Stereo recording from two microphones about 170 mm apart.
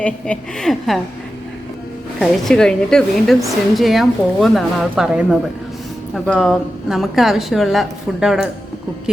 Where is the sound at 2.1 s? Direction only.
5° left (ahead or behind).